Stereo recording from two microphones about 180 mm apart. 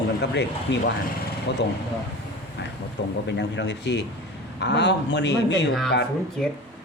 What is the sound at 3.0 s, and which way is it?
Speech, 75° left (ahead or behind).